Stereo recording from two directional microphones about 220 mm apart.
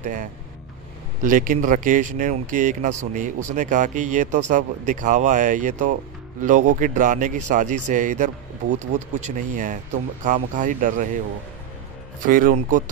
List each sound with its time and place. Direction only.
0.0 s speech: 35° right (ahead or behind)
12.2 s speech: 40° right (ahead or behind)